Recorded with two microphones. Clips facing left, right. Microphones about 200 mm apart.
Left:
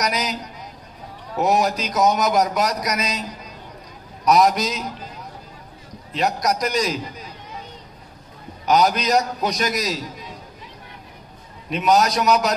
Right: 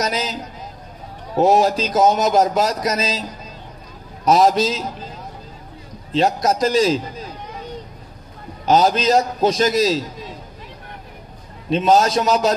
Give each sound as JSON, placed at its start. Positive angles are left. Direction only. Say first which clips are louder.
{"t": 0.0, "sound": "a man's voice", "louder": "right 1 dB", "side_deg": -25}
{"t": 6.1, "sound": "a man's voice", "louder": "right 4 dB", "side_deg": -25}
{"t": 8.6, "sound": "a man's voice", "louder": "right 3 dB", "side_deg": -25}
{"t": 11.7, "sound": "a man's voice", "louder": "right 3 dB", "side_deg": -25}